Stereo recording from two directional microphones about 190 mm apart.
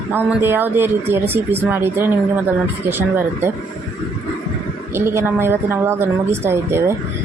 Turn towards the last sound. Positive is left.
turn(degrees=-15)  # may be behind; listen again after turning